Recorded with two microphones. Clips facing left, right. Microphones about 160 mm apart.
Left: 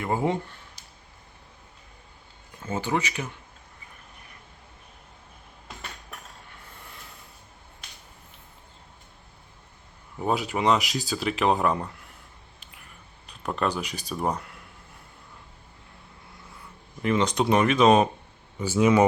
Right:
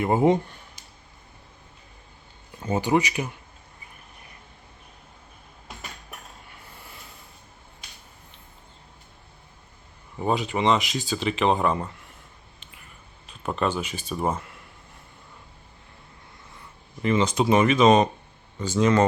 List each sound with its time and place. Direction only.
0.0 s speech: 20° right (ahead or behind)
2.6 s speech: 15° right (ahead or behind)
10.2 s speech: centre (ahead or behind)
12.7 s a sound: centre (ahead or behind)
16.5 s speech: centre (ahead or behind)